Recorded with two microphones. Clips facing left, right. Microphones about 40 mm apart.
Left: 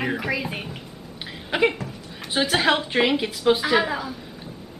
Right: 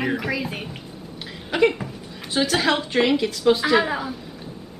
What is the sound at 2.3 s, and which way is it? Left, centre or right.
A man's voice, centre.